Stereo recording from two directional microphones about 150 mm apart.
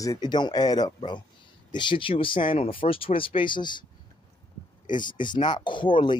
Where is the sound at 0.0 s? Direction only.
25° left (ahead or behind).